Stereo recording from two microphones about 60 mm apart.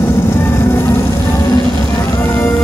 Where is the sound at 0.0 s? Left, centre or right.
Left.